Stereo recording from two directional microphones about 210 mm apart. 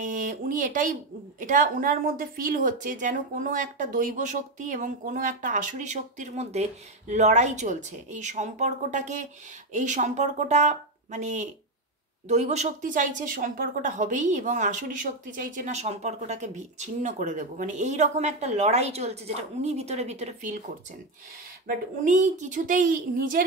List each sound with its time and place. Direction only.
0.0 s a woman's voice: 40° right (ahead or behind)
21.6 s a woman's voice: 35° right (ahead or behind)